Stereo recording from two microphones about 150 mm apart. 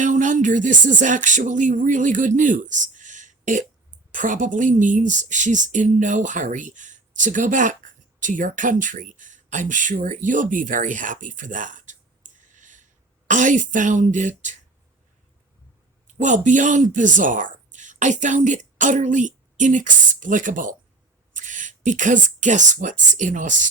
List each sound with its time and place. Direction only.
0.0 s a sound: 55° right (ahead or behind)
4.1 s a woman's voice: 60° right (ahead or behind)
16.1 s speech: 55° right (ahead or behind)